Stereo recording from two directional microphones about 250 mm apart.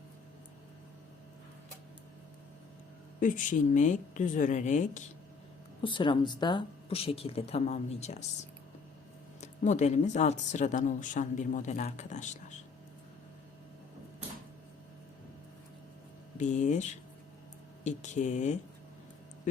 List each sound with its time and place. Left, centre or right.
3.2 s speech: left
5.8 s speech: centre
9.4 s speech: left
16.4 s speech: left